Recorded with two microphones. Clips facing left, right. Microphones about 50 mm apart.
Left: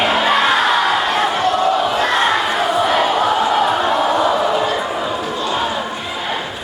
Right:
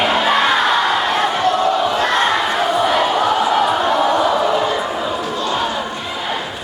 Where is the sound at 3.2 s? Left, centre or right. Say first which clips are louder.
Even; centre.